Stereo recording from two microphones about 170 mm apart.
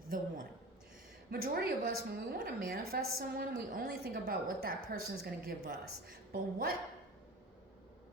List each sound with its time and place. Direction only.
1.3 s a woman's voice: 60° right (ahead or behind)